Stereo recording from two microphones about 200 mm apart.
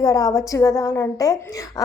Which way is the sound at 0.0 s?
15° left (ahead or behind).